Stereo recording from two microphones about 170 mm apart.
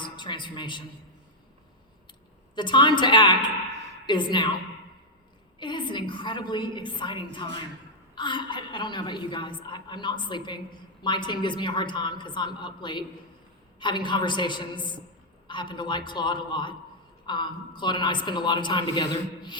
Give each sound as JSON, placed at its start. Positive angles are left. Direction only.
{"t": 0.0, "sound": "a sound", "side_deg": 25}
{"t": 2.6, "sound": "a woman's voice", "side_deg": 25}
{"t": 5.5, "sound": "a woman's voice", "side_deg": 25}